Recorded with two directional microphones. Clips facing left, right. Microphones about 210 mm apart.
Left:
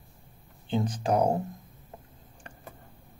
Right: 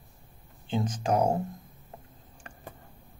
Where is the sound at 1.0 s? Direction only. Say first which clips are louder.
Even; 35° left (ahead or behind).